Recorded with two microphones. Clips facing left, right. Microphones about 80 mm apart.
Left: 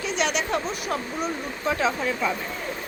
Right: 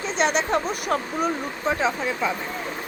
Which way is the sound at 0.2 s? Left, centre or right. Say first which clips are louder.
Right 4 dB; right.